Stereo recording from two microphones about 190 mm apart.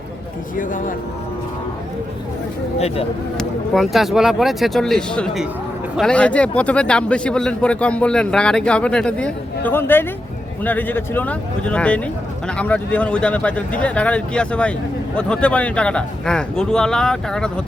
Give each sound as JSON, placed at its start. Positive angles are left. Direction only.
{"t": 0.5, "sound": "speech", "side_deg": 45}
{"t": 2.7, "sound": "speech", "side_deg": 30}
{"t": 3.3, "sound": "speech", "side_deg": 0}